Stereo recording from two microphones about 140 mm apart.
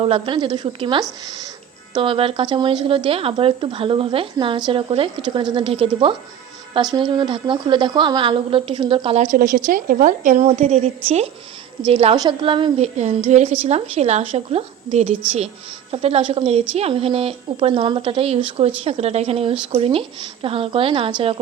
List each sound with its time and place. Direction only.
0.0 s speech: 40° right (ahead or behind)
9.2 s a woman's voice: 90° right; by 10.4 s 65° right (ahead or behind)
10.4 s speech: 50° right (ahead or behind)
12.1 s speech: 30° right (ahead or behind)
12.8 s speech: 50° right (ahead or behind)